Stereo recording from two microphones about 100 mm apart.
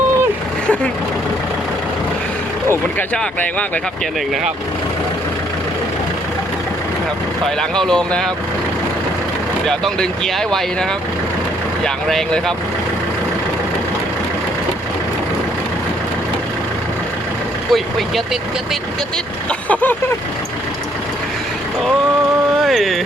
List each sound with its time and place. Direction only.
7.8 s speech: 5° left (ahead or behind)
9.6 s speech: 5° left (ahead or behind)
12.0 s speech: 5° left (ahead or behind)
17.7 s speech: centre (ahead or behind)
19.6 s vehicle: 15° left (ahead or behind)
22.6 s speech: centre (ahead or behind)